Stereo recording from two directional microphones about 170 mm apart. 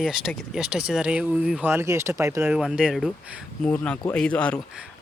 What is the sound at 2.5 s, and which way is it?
Speech, 5° right (ahead or behind).